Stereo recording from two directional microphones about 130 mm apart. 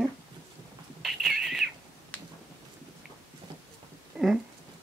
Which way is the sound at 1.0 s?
Centre (ahead or behind).